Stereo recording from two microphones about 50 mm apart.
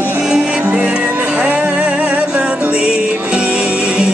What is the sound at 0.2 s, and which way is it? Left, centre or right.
Music, centre.